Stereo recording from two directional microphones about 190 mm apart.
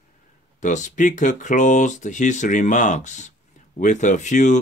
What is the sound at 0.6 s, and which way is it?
Speech, 40° left (ahead or behind).